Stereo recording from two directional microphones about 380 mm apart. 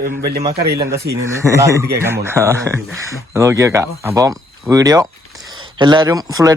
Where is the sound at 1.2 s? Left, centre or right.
Centre.